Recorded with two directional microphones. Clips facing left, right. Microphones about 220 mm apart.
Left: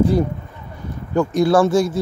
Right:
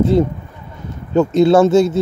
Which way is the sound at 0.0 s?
25° right (ahead or behind).